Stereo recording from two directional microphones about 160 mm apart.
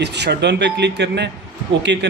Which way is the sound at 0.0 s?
90° right.